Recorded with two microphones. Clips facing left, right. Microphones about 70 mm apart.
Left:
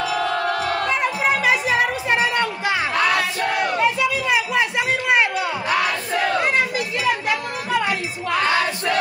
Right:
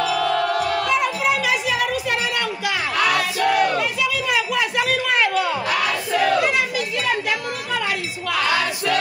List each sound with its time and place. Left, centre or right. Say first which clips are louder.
0.0 s music: right 1 dB; left
6.1 s battle cry: right 2 dB; left
7.8 s music: left 1 dB; left